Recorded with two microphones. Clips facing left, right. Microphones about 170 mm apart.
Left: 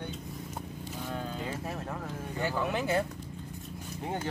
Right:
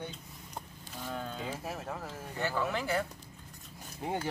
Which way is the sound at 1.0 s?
5° left (ahead or behind).